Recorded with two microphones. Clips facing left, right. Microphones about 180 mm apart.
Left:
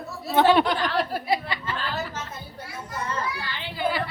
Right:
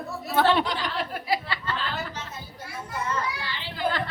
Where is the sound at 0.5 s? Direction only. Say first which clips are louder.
Left 4 dB; 55° left (ahead or behind).